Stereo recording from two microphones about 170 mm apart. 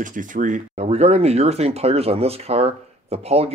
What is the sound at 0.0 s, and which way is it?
Speech, 50° right (ahead or behind).